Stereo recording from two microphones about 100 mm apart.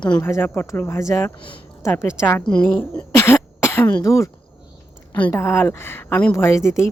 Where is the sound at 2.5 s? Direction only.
15° left (ahead or behind).